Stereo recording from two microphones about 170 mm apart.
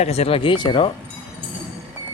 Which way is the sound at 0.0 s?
35° left (ahead or behind).